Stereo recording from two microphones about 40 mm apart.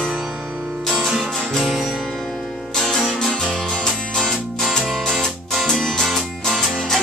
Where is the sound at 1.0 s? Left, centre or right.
Centre.